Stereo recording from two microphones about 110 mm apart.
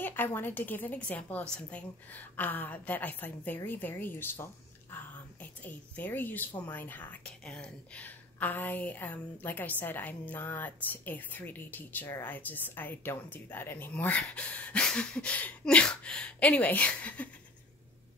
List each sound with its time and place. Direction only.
0.0 s a woman's voice: 20° left (ahead or behind)